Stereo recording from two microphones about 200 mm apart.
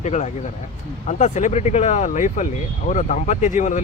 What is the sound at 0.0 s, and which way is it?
Speech, 35° left (ahead or behind).